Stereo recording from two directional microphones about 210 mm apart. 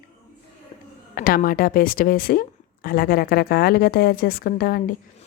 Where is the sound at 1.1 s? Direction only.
40° left (ahead or behind).